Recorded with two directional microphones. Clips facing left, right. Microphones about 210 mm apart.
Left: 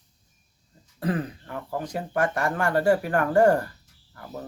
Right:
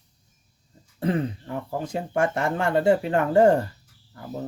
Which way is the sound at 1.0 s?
25° right (ahead or behind).